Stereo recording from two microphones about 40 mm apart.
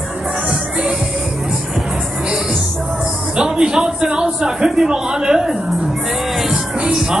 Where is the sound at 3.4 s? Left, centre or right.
Centre.